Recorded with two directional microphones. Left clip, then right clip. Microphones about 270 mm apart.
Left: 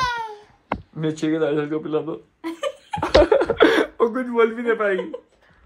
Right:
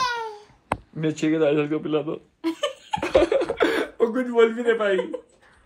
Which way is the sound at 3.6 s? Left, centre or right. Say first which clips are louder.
Left 6 dB; left.